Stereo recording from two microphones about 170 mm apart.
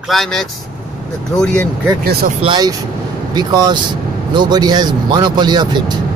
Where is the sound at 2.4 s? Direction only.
25° right (ahead or behind).